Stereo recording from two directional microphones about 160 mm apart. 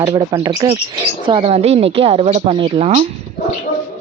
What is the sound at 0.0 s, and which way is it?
Speech, 25° right (ahead or behind).